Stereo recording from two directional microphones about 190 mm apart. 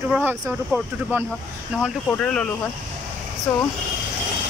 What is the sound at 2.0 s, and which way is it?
Speech, 5° left (ahead or behind).